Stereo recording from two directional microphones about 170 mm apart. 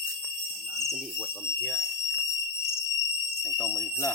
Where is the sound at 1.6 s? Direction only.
5° left (ahead or behind).